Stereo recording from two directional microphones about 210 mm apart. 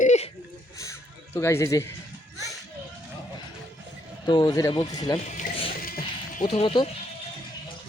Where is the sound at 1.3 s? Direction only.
15° left (ahead or behind).